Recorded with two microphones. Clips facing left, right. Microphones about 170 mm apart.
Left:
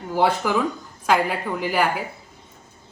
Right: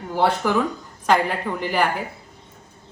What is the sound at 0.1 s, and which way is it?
A woman's voice, 5° left (ahead or behind).